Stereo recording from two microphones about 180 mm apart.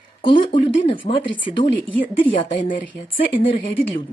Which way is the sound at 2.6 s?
50° left (ahead or behind).